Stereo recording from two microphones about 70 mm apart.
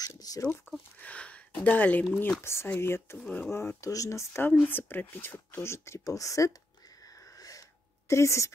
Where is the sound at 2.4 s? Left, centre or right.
Left.